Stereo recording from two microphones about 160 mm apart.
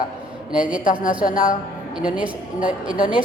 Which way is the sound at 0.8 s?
60° left (ahead or behind).